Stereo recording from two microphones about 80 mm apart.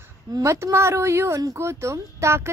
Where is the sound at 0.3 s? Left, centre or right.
Right.